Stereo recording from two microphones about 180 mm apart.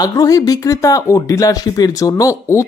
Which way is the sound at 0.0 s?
20° left (ahead or behind).